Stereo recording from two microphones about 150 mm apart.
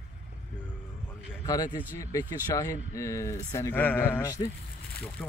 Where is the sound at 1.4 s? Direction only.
25° left (ahead or behind).